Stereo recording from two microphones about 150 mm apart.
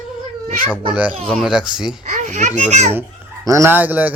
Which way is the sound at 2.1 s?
55° right (ahead or behind).